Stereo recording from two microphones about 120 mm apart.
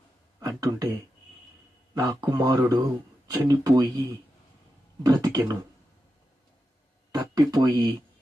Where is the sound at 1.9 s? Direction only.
35° right (ahead or behind).